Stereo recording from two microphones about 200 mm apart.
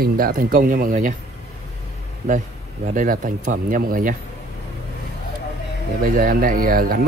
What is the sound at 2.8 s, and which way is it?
Speech, 40° right (ahead or behind).